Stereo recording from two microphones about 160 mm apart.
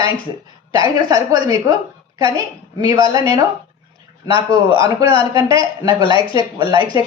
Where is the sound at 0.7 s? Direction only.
35° left (ahead or behind).